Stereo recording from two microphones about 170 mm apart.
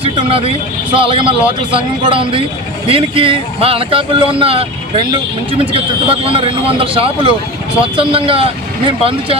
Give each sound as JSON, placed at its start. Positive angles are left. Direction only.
{"t": 0.0, "sound": "speech", "side_deg": -35}